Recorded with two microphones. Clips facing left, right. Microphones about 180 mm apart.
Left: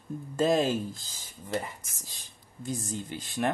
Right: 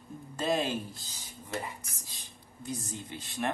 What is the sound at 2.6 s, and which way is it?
Speech, 45° left (ahead or behind).